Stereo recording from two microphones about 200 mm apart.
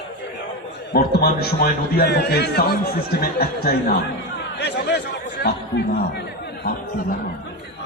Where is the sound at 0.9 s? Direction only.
50° left (ahead or behind).